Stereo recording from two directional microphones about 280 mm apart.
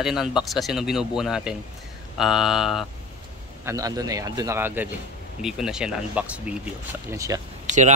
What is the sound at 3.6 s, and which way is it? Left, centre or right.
Speech, centre.